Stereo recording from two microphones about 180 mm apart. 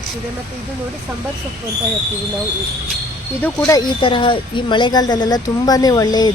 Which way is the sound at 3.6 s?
20° left (ahead or behind).